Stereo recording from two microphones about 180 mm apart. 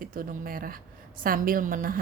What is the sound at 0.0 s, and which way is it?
A woman's voice, 50° right (ahead or behind).